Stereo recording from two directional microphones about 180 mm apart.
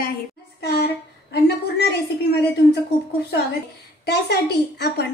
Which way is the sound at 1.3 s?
65° left (ahead or behind).